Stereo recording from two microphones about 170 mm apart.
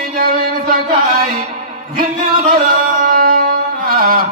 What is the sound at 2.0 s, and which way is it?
Music, 55° right (ahead or behind).